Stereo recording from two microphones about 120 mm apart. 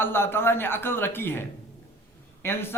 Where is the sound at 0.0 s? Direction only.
20° left (ahead or behind).